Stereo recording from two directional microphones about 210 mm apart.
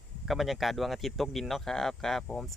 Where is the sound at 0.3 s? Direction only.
Centre (ahead or behind).